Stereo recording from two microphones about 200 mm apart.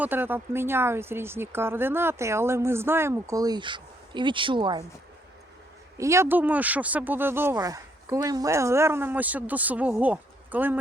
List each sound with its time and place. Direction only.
0.0 s speech: 10° right (ahead or behind)
6.0 s speech: 15° right (ahead or behind)